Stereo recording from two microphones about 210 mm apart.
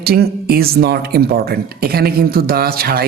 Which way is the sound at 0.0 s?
45° right (ahead or behind).